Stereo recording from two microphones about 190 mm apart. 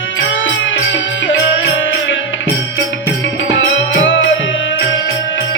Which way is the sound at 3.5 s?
80° left.